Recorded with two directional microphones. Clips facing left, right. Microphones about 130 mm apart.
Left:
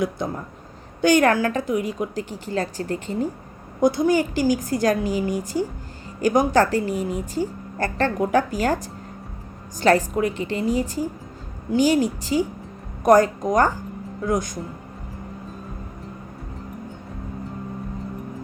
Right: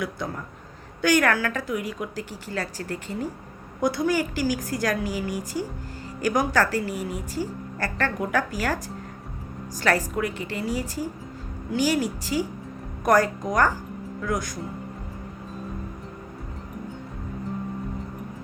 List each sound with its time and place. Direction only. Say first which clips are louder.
0.0 s a woman's voice: left 5 dB; 25° left (ahead or behind)
9.8 s a woman's voice: left 6 dB; 25° left (ahead or behind)